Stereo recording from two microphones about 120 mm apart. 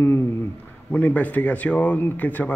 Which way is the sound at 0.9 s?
15° left (ahead or behind).